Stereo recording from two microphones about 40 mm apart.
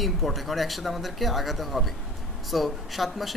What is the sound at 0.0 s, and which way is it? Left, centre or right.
A man's voice, centre.